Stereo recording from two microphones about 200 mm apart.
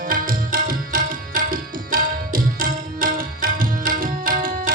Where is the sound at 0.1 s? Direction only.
45° right (ahead or behind).